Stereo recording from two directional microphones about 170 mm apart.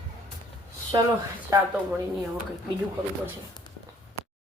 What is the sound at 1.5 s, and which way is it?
Speech, 20° right (ahead or behind).